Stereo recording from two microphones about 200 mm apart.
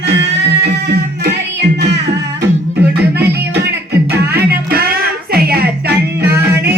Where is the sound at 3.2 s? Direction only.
55° right (ahead or behind).